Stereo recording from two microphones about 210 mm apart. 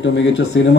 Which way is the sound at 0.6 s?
55° left (ahead or behind).